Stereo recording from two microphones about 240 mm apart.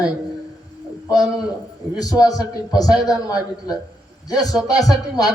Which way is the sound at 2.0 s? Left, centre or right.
Centre.